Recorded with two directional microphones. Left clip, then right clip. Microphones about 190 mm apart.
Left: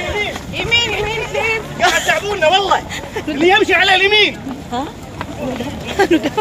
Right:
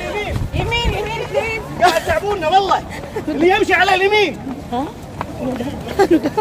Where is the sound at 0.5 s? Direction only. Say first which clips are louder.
Left 5 dB; 60° right (ahead or behind).